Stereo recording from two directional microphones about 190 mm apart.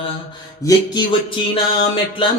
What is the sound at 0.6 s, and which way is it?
Mantra, 25° left (ahead or behind).